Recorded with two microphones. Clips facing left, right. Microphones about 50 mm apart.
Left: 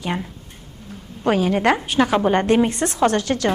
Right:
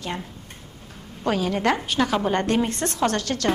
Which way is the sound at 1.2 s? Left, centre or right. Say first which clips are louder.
Left 5 dB; centre.